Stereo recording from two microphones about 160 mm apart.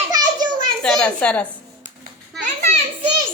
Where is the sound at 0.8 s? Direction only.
5° left (ahead or behind).